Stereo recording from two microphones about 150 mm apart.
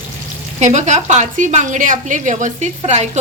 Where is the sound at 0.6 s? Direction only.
50° right (ahead or behind).